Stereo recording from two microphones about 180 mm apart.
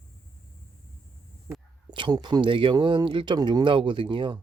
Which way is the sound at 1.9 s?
25° right (ahead or behind).